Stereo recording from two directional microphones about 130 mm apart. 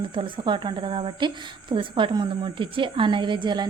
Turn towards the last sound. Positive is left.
turn(degrees=-35)  # may be behind; listen again after turning